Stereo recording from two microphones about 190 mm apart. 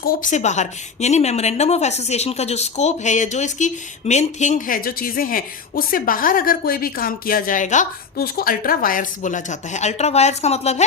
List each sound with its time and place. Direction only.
0.0 s a woman's voice: 45° left (ahead or behind)